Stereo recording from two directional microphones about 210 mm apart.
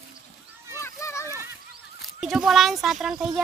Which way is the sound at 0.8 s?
15° left (ahead or behind).